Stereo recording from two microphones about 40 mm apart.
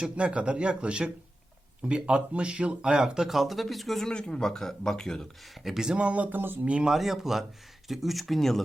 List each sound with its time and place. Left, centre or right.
0.2 s speech: right
2.9 s speech: centre
3.2 s speech: centre
4.1 s speech: left
5.7 s speech: centre
6.0 s a sound: right
6.3 s speech: right
6.8 s speech: centre